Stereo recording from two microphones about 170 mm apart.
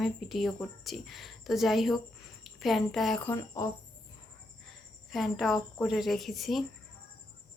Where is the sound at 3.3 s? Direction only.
20° left (ahead or behind).